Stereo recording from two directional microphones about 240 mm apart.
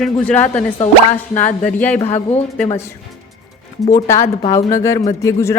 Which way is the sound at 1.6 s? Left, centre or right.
Centre.